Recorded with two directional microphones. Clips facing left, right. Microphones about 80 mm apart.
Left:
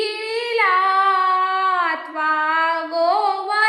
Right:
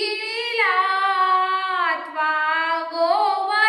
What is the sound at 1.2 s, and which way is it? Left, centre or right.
Female singing, centre.